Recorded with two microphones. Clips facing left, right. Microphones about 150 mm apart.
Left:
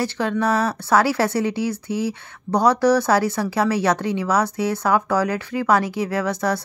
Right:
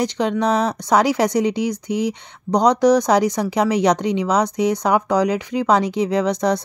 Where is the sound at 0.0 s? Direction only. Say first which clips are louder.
Right 2 dB; 20° right (ahead or behind).